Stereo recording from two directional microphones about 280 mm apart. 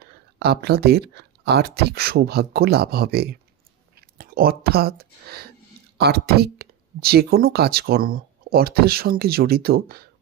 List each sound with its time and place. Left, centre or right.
0.0 s speech: right